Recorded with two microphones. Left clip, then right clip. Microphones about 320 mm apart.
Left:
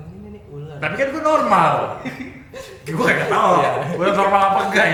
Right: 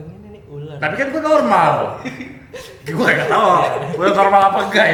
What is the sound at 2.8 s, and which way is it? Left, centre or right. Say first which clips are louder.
A man's voice: right 2 dB; right.